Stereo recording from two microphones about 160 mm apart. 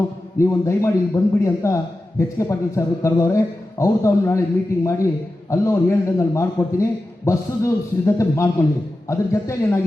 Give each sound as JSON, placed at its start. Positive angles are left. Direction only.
{"t": 0.3, "sound": "a man's voice", "side_deg": 20}